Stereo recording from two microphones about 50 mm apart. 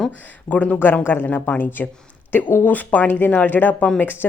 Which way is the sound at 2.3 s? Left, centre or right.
Left.